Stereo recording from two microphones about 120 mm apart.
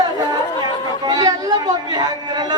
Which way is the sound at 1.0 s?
30° right (ahead or behind).